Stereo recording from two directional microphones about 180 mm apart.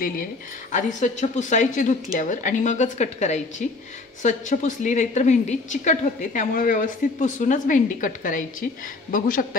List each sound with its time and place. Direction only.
0.7 s a woman's voice: 45° left (ahead or behind)